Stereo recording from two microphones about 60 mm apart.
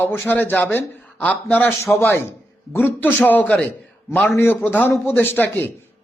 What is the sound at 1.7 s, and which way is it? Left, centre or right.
A man's voice, left.